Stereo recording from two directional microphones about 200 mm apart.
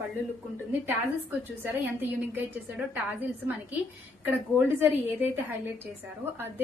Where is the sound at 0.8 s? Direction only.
10° right (ahead or behind).